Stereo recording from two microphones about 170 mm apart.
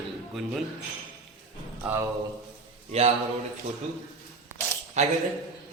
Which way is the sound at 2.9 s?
40° right (ahead or behind).